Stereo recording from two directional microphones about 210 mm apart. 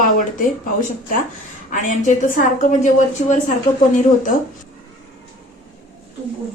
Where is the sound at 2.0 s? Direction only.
40° left (ahead or behind).